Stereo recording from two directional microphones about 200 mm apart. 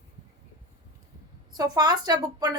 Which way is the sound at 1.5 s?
20° right (ahead or behind).